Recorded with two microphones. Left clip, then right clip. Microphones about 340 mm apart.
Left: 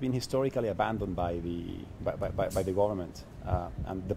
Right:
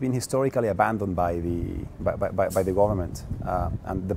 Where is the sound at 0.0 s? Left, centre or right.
Right.